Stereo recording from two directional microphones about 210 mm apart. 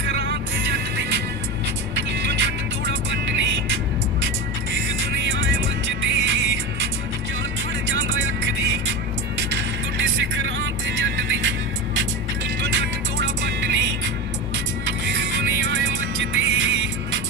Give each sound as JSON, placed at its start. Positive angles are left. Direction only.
{"t": 0.0, "sound": "music", "side_deg": -55}
{"t": 9.4, "sound": "music", "side_deg": -60}